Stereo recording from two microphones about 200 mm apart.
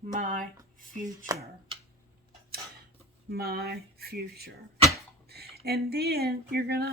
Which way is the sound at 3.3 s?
50° right (ahead or behind).